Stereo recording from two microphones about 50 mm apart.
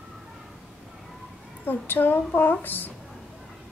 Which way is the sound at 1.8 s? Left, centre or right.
Left.